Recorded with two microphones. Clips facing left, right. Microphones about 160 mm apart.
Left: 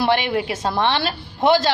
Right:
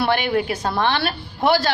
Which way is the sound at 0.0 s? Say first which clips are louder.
Even; 25° left (ahead or behind).